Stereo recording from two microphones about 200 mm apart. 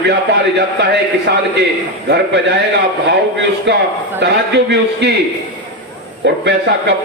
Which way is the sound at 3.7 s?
60° right (ahead or behind).